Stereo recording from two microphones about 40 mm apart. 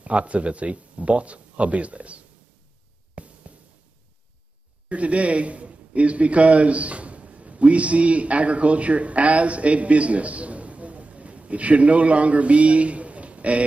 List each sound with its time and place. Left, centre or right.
0.0 s a man's voice: right
3.2 s music: right
4.8 s a man's voice: right